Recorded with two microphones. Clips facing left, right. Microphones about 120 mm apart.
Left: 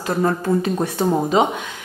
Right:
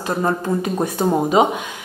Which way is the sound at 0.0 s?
15° right (ahead or behind).